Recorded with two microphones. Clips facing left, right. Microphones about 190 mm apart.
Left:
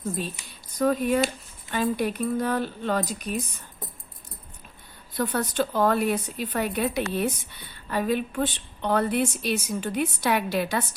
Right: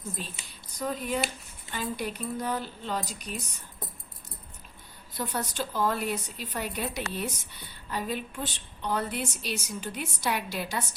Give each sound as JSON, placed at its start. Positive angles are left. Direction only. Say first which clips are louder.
{"t": 0.8, "sound": "speech", "louder": "left 8 dB", "side_deg": 55}
{"t": 5.1, "sound": "speech", "louder": "left 7 dB", "side_deg": 60}